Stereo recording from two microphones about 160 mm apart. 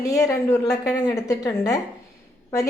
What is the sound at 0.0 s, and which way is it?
Speech, 20° left (ahead or behind).